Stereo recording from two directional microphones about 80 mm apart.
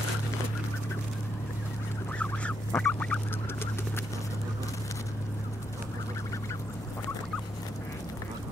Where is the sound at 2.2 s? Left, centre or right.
Centre.